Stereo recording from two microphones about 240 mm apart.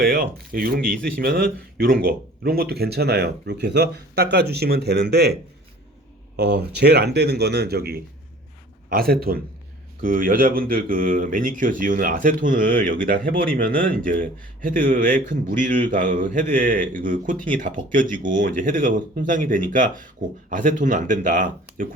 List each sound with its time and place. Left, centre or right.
0.0 s speech: right